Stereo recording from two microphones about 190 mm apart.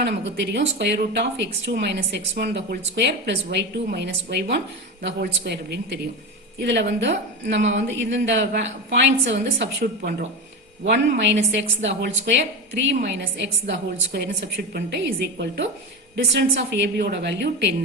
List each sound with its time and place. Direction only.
0.0 s a woman's voice: 65° right (ahead or behind)